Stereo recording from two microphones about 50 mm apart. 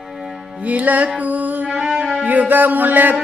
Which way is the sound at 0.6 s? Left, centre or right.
Right.